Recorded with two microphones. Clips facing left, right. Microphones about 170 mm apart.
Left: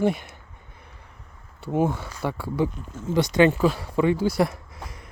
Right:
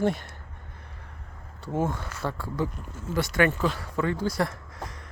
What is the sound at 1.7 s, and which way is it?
Speech, 10° left (ahead or behind).